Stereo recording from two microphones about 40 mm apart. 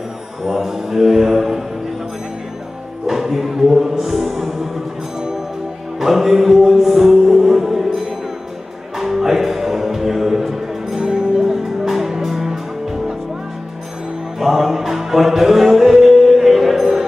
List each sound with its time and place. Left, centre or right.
0.5 s mantra: centre
3.1 s speech: centre
5.9 s music: centre
11.0 s music: centre
11.4 s music: centre
14.4 s music: centre